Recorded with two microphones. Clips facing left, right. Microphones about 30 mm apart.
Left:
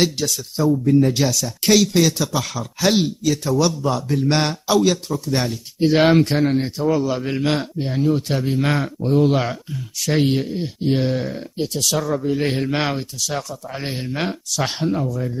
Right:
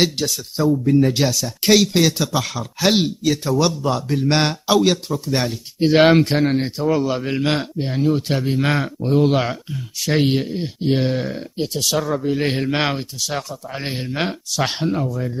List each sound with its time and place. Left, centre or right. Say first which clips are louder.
0.0 s speech: right 1 dB; centre